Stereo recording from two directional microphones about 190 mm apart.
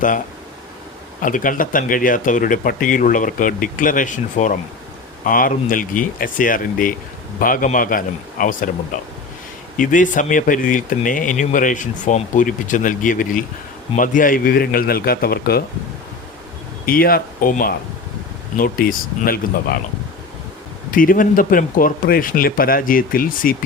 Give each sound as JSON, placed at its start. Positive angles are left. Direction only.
{"t": 1.2, "sound": "speech", "side_deg": 45}
{"t": 16.8, "sound": "speech", "side_deg": 50}
{"t": 20.9, "sound": "speech", "side_deg": 45}